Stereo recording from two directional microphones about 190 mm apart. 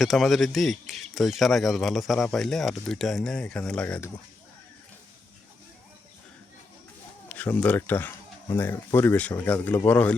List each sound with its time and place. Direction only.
0.0 s speech: centre (ahead or behind)
7.3 s speech: 10° left (ahead or behind)